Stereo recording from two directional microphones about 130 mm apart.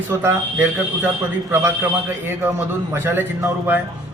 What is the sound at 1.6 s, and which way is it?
A man's voice, 15° right (ahead or behind).